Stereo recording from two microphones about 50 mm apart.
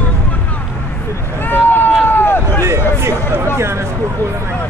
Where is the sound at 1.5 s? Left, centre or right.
Left.